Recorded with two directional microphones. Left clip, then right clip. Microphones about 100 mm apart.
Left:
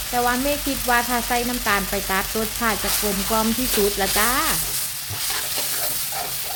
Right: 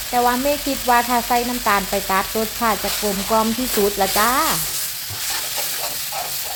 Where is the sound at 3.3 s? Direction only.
5° right (ahead or behind).